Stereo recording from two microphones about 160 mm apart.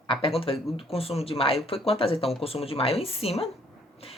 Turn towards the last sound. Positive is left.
turn(degrees=40)  # may be behind; listen again after turning